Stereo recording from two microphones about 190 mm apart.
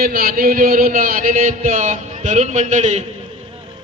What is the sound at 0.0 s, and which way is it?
Speech, 50° right (ahead or behind).